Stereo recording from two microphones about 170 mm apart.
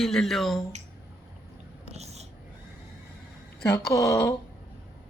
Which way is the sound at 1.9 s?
40° right (ahead or behind).